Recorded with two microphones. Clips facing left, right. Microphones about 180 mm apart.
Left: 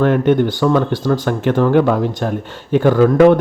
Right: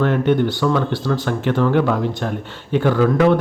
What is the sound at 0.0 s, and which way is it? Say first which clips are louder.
Speech: left 3 dB; 50° left (ahead or behind).